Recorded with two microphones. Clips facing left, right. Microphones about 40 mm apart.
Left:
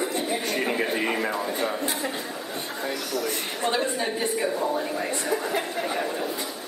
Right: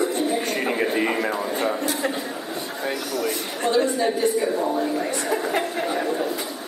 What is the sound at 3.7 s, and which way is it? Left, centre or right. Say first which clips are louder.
Speech: right 8 dB; centre.